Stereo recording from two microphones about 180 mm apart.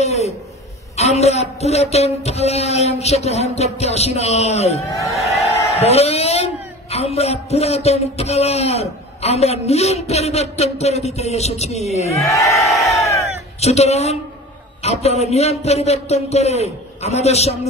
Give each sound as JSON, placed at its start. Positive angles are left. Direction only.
{"t": 0.0, "sound": "a sound", "side_deg": 35}
{"t": 0.9, "sound": "a man's voice", "side_deg": 35}
{"t": 12.2, "sound": "a sound", "side_deg": 15}
{"t": 12.5, "sound": "crowd", "side_deg": 0}
{"t": 13.0, "sound": "crowd", "side_deg": 15}
{"t": 13.6, "sound": "speech", "side_deg": 35}